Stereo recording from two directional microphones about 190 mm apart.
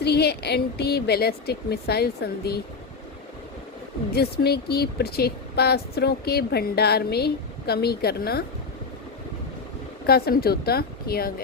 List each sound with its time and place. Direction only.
0.0 s speech: 60° left (ahead or behind)
4.1 s speech: 55° left (ahead or behind)
10.1 s speech: 55° left (ahead or behind)